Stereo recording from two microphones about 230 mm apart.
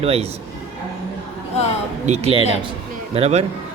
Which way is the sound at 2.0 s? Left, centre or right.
Right.